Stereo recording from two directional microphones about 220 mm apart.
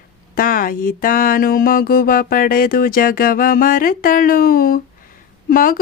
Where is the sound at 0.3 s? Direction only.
40° left (ahead or behind).